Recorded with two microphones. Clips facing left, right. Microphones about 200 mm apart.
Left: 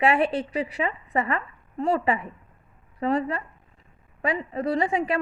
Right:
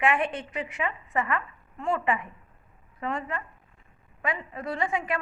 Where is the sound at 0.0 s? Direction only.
35° left (ahead or behind).